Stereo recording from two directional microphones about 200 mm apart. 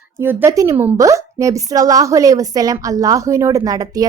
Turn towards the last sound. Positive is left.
turn(degrees=-20)  # may be behind; listen again after turning